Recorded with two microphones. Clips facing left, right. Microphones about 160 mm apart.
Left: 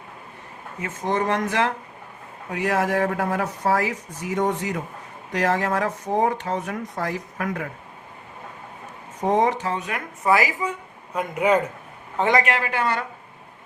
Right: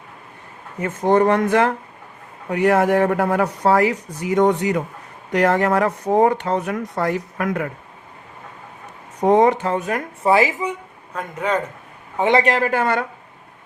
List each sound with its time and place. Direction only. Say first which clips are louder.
0.8 s speech: right 8 dB; 55° right (ahead or behind); by 4.8 s 80° right
5.4 s speech: right 5 dB; 60° right (ahead or behind)
9.2 s speech: right 6 dB; 65° right (ahead or behind); by 10.0 s 45° right (ahead or behind)
10.2 s speech: right 4 dB; 25° right (ahead or behind)
11.1 s a man's voice: left 2 dB; 10° left (ahead or behind)
12.3 s speech: right 5 dB; 35° right (ahead or behind); by 13.1 s 55° right (ahead or behind)